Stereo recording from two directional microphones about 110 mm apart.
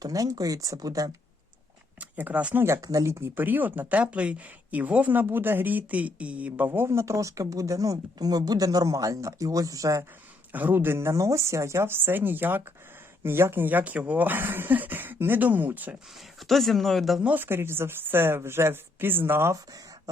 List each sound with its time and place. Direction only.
0.0 s speech: 35° right (ahead or behind)
2.0 s speech: 15° right (ahead or behind)
2.6 s speech: 30° right (ahead or behind)
10.5 s speech: 15° right (ahead or behind)
16.4 s speech: centre (ahead or behind)
17.2 s speech: 15° right (ahead or behind)